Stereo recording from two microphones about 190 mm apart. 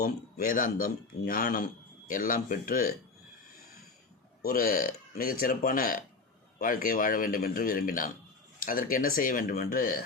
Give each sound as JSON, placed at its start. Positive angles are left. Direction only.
{"t": 0.0, "sound": "speech", "side_deg": 45}
{"t": 4.4, "sound": "speech", "side_deg": 50}